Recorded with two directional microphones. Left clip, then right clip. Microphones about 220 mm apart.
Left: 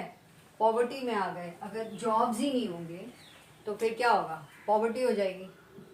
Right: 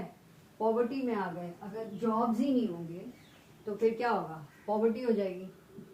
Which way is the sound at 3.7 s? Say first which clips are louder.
Left 3 dB; 30° left (ahead or behind).